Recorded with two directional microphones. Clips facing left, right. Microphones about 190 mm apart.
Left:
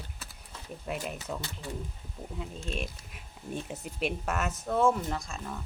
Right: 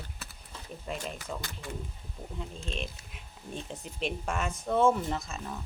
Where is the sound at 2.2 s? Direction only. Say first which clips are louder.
Left 1 dB; centre (ahead or behind).